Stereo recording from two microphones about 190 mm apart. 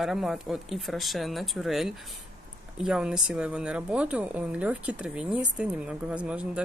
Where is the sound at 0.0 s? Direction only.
Centre (ahead or behind).